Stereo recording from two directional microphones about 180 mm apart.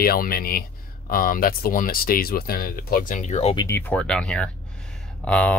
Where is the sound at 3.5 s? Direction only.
15° left (ahead or behind).